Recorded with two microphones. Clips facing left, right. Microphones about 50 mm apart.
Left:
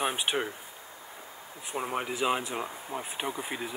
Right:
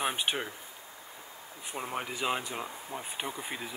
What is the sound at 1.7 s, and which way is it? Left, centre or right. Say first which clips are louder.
Speech: left 4 dB; centre.